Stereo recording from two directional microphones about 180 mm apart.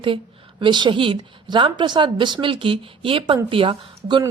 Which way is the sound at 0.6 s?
25° right (ahead or behind).